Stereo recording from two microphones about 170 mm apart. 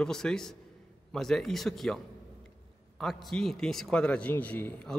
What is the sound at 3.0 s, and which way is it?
A man's voice, centre (ahead or behind).